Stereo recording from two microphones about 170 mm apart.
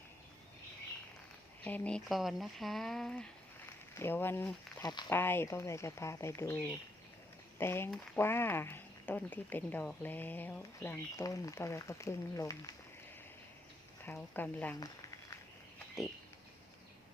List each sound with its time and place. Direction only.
1.6 s speech: 10° left (ahead or behind)
4.8 s speech: 25° left (ahead or behind)
5.1 s speech: 15° left (ahead or behind)
14.0 s speech: 10° left (ahead or behind)